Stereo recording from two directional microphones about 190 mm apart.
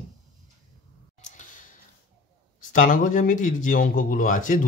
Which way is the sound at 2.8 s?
45° left (ahead or behind).